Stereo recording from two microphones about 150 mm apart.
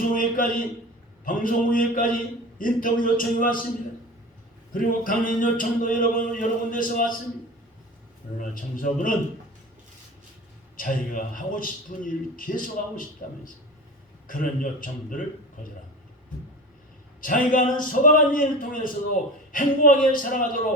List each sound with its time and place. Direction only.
0.0 s a sound: 65° left (ahead or behind)
1.2 s a man's voice: 65° left (ahead or behind)
4.7 s a man's voice: 65° left (ahead or behind)
8.4 s a man's voice: 65° left (ahead or behind)
10.8 s a man's voice: 65° left (ahead or behind)
17.2 s a man's voice: 65° left (ahead or behind)